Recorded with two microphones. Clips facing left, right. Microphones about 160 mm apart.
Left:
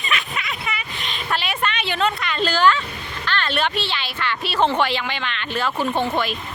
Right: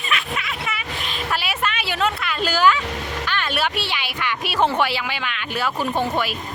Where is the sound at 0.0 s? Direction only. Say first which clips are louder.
Right 1 dB; centre (ahead or behind).